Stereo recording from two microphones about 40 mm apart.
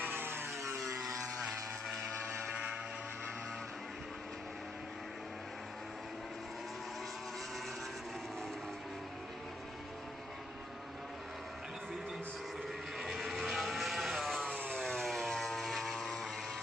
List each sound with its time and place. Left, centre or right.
0.1 s vehicle: right
0.8 s vehicle: centre
13.1 s vehicle: centre